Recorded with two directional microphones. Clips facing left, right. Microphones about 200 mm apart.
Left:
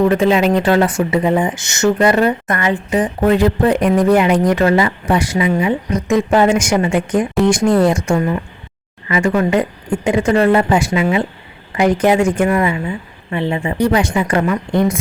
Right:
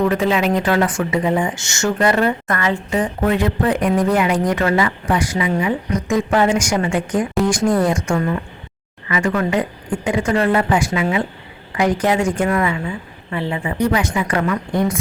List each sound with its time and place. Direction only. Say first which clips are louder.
0.0 s a woman's voice: left 4 dB; 25° left (ahead or behind)
3.2 s a woman's voice: left 6 dB; 35° left (ahead or behind)